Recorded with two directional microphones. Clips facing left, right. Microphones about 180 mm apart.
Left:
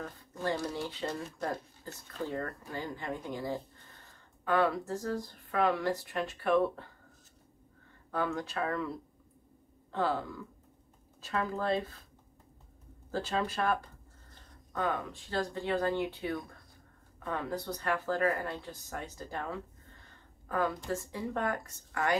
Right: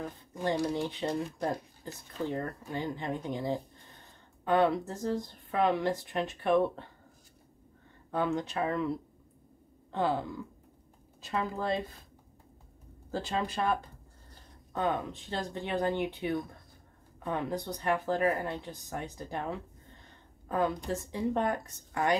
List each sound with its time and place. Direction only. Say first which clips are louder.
0.0 s speech: right 2 dB; 15° right (ahead or behind)
8.1 s speech: right 3 dB; 20° right (ahead or behind)
9.9 s speech: right 2 dB; 20° right (ahead or behind)
13.1 s speech: even; 15° right (ahead or behind)